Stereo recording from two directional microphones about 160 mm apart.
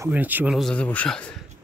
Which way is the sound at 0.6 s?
5° left (ahead or behind).